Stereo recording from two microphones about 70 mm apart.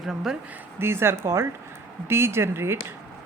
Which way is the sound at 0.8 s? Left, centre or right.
Right.